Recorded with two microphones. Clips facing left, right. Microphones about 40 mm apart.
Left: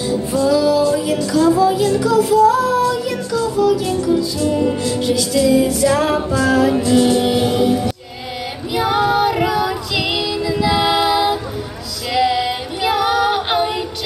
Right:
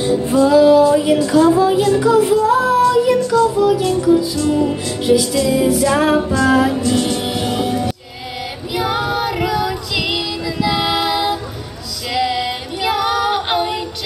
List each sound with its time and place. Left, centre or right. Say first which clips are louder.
0.0 s music: right 3 dB; right
1.1 s a sound: right 3 dB; right
2.0 s music: right 2 dB; right
2.4 s child singing: left 1 dB; right
2.9 s music: right 6 dB; centre
4.1 s music: right 3 dB; centre
5.0 s music: right 2 dB; centre
6.7 s music: left 4 dB; centre
8.7 s female singing: left 3 dB; centre